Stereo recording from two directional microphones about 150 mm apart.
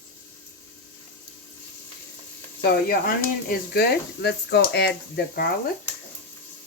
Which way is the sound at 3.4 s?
90° left.